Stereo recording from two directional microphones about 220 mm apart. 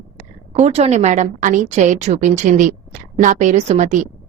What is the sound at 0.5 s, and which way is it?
A woman's voice, 30° right (ahead or behind).